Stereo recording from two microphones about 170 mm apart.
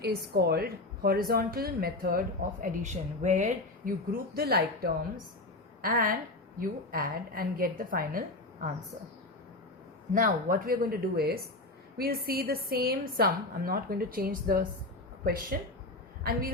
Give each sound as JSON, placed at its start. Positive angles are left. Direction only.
{"t": 0.0, "sound": "a woman's voice", "side_deg": -70}
{"t": 4.4, "sound": "a woman's voice", "side_deg": -65}
{"t": 10.2, "sound": "a woman's voice", "side_deg": -55}